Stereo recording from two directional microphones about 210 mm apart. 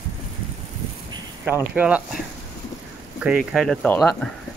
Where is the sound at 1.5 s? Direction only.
10° right (ahead or behind).